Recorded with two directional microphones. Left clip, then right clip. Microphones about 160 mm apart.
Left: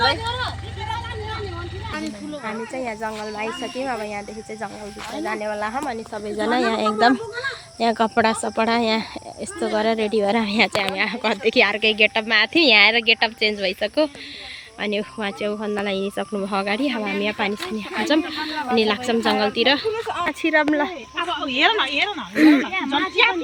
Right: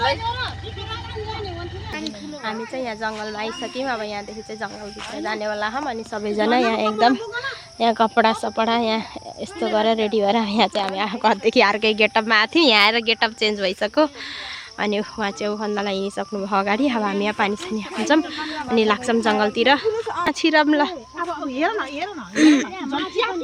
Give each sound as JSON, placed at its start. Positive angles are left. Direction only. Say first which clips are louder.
{"t": 2.7, "sound": "speech", "louder": "even", "side_deg": 0}
{"t": 5.2, "sound": "speech", "louder": "right 1 dB", "side_deg": -5}
{"t": 6.1, "sound": "a woman's voice", "louder": "right 3 dB", "side_deg": -45}
{"t": 6.5, "sound": "speech", "louder": "right 1 dB", "side_deg": -15}
{"t": 6.7, "sound": "speech", "louder": "even", "side_deg": 0}
{"t": 16.5, "sound": "speech", "louder": "right 4 dB", "side_deg": -15}
{"t": 20.2, "sound": "speech", "louder": "right 2 dB", "side_deg": -35}
{"t": 21.5, "sound": "speech", "louder": "left 7 dB", "side_deg": -40}
{"t": 22.4, "sound": "speech", "louder": "even", "side_deg": -10}